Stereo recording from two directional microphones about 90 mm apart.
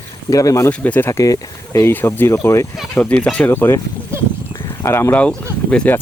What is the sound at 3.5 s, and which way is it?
Speech, 25° left (ahead or behind).